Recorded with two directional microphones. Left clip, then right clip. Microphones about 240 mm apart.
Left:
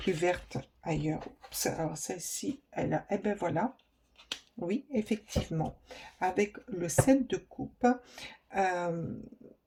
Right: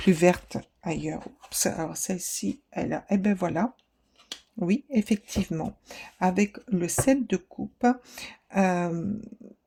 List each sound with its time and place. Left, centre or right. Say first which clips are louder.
0.0 s speech: right 8 dB; right